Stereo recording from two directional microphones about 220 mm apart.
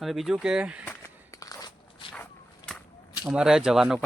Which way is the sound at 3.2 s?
5° right (ahead or behind).